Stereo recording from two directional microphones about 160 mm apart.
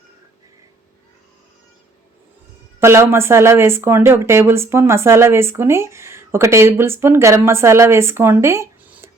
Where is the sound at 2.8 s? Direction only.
15° right (ahead or behind).